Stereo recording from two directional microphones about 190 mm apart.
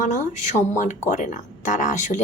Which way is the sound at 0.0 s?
40° left (ahead or behind).